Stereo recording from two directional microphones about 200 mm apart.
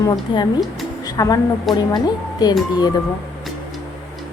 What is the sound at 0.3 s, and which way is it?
A woman's voice, 20° left (ahead or behind).